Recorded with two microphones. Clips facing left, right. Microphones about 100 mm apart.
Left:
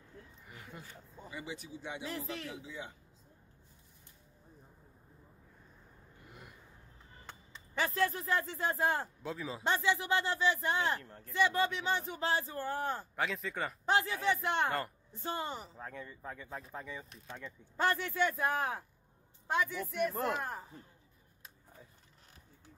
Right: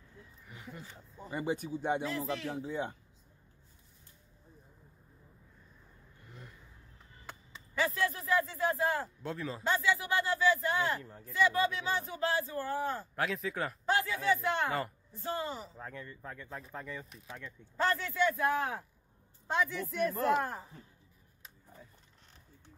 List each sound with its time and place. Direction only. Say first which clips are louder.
1.3 s speech: right 10 dB; 50° right (ahead or behind)
2.0 s speech: right 5 dB; 90° right
2.5 s speech: right 9 dB; 50° right (ahead or behind)
7.9 s speech: even; 35° left (ahead or behind)
9.2 s speech: right 2 dB; centre (ahead or behind)
9.6 s speech: right 1 dB; 25° left (ahead or behind)
11.0 s speech: right 3 dB; 5° right (ahead or behind)
11.3 s speech: right 1 dB; 25° left (ahead or behind)
13.1 s speech: right 2 dB; centre (ahead or behind)
13.8 s speech: right 1 dB; 20° left (ahead or behind)
15.7 s speech: even; centre (ahead or behind)
17.5 s speech: right 1 dB; 15° left (ahead or behind)
19.7 s speech: right 1 dB; 5° left (ahead or behind)